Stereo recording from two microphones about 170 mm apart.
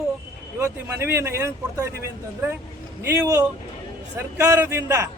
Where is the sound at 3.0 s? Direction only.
15° right (ahead or behind).